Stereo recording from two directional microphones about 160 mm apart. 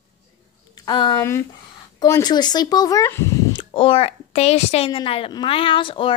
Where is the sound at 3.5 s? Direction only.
35° left (ahead or behind).